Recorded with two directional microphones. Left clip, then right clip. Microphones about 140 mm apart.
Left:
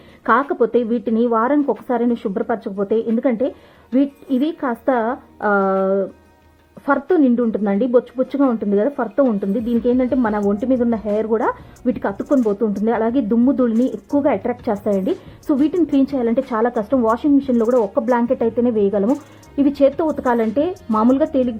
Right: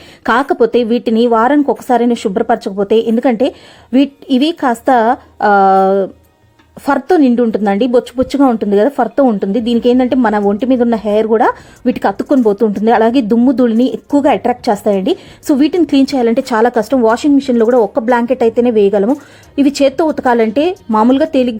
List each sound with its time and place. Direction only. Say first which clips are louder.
0.3 s a woman's voice: right 5 dB; 30° right (ahead or behind)